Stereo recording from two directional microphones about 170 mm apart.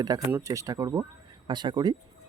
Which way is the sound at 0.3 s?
15° right (ahead or behind).